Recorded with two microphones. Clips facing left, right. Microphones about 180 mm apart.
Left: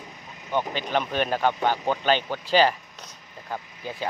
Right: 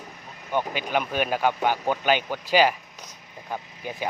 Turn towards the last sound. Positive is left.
turn(degrees=-15)  # may be behind; listen again after turning